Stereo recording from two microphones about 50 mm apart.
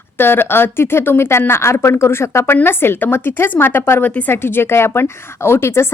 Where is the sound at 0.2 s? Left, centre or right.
Left.